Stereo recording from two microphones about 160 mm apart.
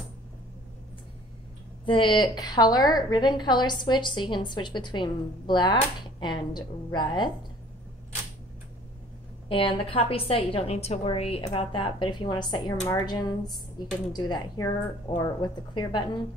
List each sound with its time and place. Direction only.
1.9 s a woman's voice: 30° left (ahead or behind)
9.5 s a woman's voice: 35° left (ahead or behind)